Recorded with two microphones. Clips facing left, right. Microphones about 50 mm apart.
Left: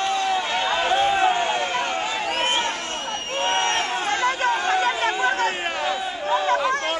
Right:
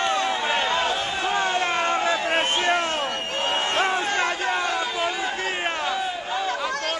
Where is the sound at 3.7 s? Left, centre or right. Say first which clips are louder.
Right 2 dB; right.